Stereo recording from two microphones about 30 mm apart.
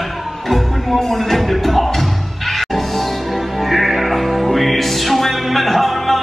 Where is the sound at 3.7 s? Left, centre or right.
Centre.